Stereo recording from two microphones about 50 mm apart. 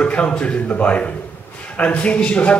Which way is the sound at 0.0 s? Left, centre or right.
Left.